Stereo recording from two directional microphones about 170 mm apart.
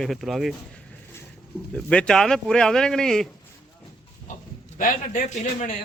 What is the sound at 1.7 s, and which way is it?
Speech, 5° left (ahead or behind).